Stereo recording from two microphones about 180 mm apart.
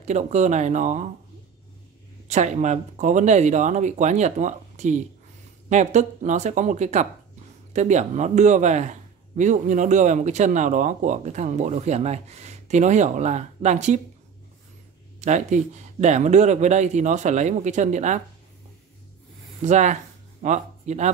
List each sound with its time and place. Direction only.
0.0 s a man's voice: 40° right (ahead or behind)
2.2 s a man's voice: 40° right (ahead or behind)
15.1 s a man's voice: 40° right (ahead or behind)
19.6 s a man's voice: 40° right (ahead or behind)